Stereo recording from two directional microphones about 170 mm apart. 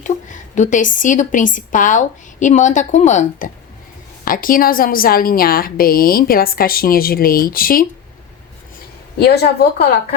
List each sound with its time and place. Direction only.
0.0 s a woman's voice: 45° left (ahead or behind)
9.1 s a woman's voice: 70° left (ahead or behind)